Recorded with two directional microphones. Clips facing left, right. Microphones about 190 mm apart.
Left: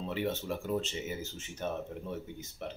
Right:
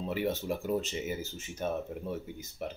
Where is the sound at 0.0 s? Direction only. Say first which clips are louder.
Right 2 dB; 10° right (ahead or behind).